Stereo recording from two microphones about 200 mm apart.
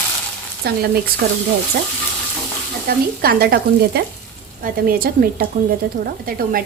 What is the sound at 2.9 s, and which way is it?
A woman's voice, 50° right (ahead or behind).